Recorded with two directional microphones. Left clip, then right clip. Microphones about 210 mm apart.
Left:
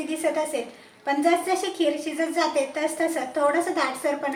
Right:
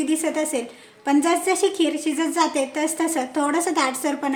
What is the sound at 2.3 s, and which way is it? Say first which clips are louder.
A woman's voice: right 1 dB; 50° right (ahead or behind).